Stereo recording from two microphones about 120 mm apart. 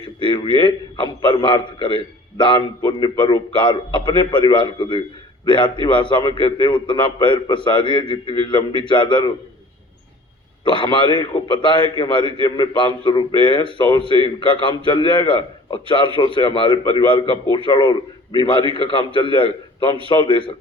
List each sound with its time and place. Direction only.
0.2 s a man's voice: 45° left (ahead or behind)
10.6 s a man's voice: 45° left (ahead or behind)